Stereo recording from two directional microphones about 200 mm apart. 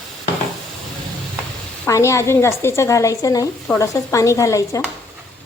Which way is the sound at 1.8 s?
15° left (ahead or behind).